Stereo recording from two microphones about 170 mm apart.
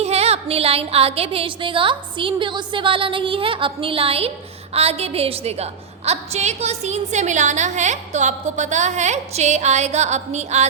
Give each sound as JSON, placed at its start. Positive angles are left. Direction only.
{"t": 0.0, "sound": "a woman's voice", "side_deg": -40}